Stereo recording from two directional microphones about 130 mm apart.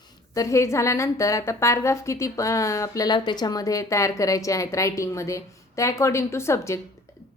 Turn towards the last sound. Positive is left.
turn(degrees=20)  # may be behind; listen again after turning